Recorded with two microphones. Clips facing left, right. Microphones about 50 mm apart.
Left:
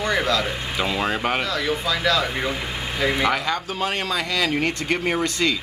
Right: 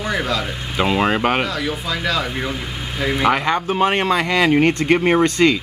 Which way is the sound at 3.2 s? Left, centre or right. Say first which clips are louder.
Right 5 dB; right.